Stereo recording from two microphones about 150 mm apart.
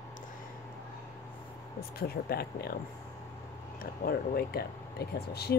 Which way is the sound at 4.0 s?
85° left.